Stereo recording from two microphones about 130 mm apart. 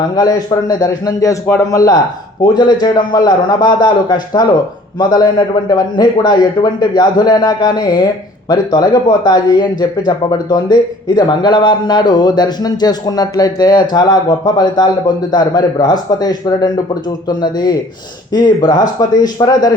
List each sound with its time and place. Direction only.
0.2 s a man's voice: 30° left (ahead or behind)